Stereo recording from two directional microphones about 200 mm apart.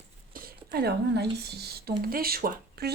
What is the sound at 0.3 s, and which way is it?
Speech, 45° right (ahead or behind).